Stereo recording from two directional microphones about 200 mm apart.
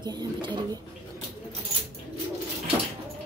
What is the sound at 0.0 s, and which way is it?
Speech, 20° right (ahead or behind).